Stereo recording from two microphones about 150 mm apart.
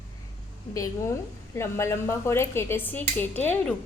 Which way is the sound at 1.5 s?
20° left (ahead or behind).